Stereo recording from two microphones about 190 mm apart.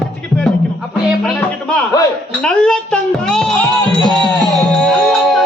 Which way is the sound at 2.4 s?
5° left (ahead or behind).